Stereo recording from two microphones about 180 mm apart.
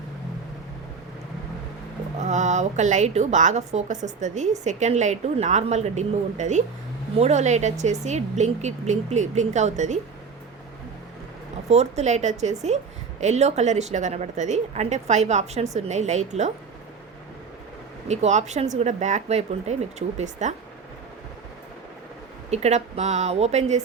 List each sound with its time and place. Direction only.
2.2 s a woman's voice: 40° right (ahead or behind)
11.7 s a woman's voice: 40° right (ahead or behind)
18.1 s a woman's voice: 40° right (ahead or behind)
22.4 s a woman's voice: 35° right (ahead or behind)